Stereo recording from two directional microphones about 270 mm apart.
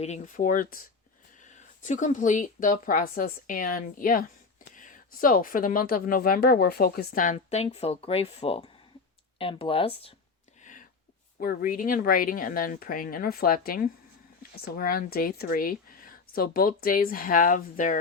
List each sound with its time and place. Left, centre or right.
0.0 s speech: left
10.6 s a sound: left
11.3 s speech: left